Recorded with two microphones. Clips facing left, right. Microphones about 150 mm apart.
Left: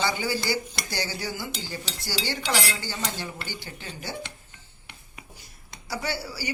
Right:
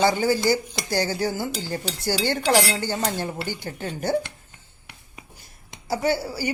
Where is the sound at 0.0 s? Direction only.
45° right (ahead or behind).